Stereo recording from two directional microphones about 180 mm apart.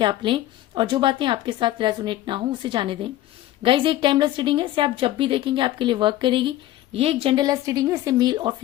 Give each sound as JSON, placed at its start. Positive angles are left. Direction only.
{"t": 0.0, "sound": "a woman's voice", "side_deg": -25}